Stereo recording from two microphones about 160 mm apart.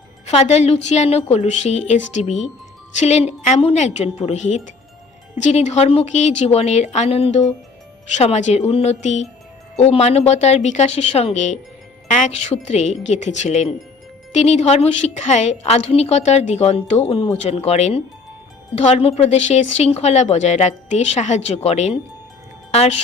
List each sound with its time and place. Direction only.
0.3 s a woman's voice: 40° left (ahead or behind)